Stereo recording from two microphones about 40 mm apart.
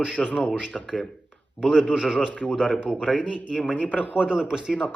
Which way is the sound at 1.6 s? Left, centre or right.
Right.